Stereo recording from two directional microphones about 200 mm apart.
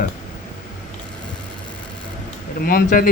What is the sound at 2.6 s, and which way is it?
Speech, 45° left (ahead or behind).